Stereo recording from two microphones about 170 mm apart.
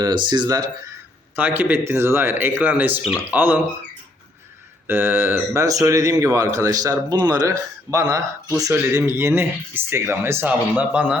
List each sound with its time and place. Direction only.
0.0 s speech: 25° right (ahead or behind)
1.4 s speech: 10° right (ahead or behind)
4.9 s speech: 10° right (ahead or behind)